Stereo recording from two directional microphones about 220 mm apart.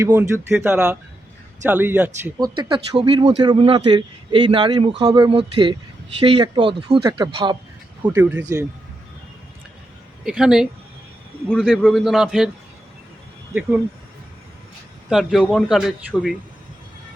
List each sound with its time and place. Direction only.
0.0 s speech: 10° right (ahead or behind)
2.2 s speech: 20° right (ahead or behind)
8.0 s speech: 10° right (ahead or behind)
10.2 s a man's voice: 5° right (ahead or behind)
13.5 s speech: 5° right (ahead or behind)
15.1 s a man's voice: centre (ahead or behind)